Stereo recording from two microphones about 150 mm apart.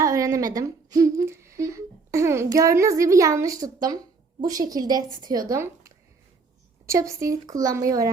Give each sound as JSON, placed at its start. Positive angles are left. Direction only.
{"t": 0.0, "sound": "humming", "side_deg": -20}
{"t": 3.8, "sound": "a woman's voice", "side_deg": -25}